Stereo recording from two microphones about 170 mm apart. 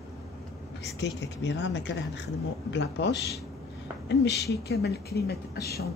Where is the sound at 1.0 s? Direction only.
90° left.